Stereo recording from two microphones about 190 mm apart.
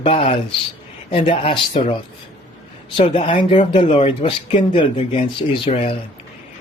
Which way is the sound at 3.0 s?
30° left (ahead or behind).